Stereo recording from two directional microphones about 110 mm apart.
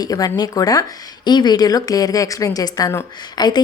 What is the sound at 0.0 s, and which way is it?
A woman's voice, 35° left (ahead or behind).